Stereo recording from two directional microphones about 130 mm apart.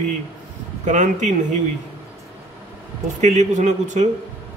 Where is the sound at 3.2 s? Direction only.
65° right (ahead or behind).